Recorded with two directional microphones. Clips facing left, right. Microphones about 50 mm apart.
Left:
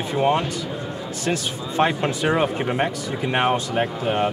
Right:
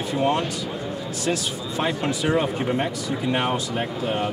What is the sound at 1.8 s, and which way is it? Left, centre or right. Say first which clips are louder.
Speech: left 4 dB; left.